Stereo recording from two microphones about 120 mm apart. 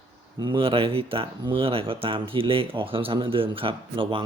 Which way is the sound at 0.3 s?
40° right (ahead or behind).